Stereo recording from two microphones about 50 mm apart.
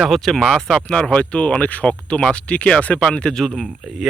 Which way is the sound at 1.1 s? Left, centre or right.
Left.